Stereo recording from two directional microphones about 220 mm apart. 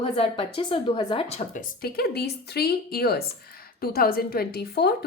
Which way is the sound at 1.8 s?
45° left (ahead or behind).